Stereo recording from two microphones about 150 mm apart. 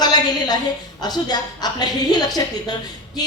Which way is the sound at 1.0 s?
25° left (ahead or behind).